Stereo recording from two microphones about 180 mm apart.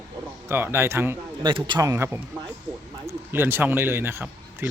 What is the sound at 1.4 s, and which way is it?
A man's voice, 25° right (ahead or behind).